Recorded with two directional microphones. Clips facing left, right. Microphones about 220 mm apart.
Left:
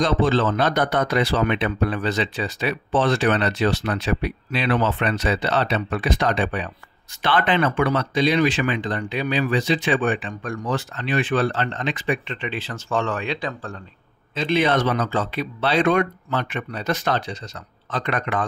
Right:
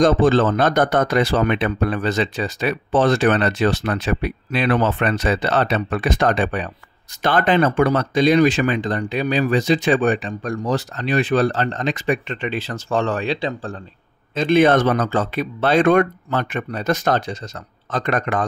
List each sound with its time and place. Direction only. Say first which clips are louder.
0.0 s speech: right 5 dB; 45° right (ahead or behind); by 13.7 s 30° right (ahead or behind)
14.3 s speech: right 6 dB; 50° right (ahead or behind)